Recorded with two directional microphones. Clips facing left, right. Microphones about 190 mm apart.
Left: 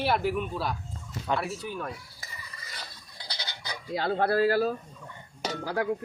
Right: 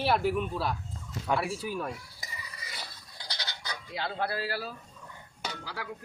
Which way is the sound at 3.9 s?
45° left (ahead or behind).